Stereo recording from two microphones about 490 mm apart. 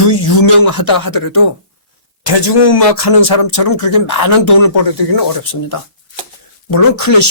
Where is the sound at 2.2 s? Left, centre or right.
Left.